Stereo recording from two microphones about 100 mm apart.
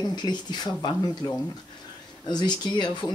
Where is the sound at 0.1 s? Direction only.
45° left (ahead or behind).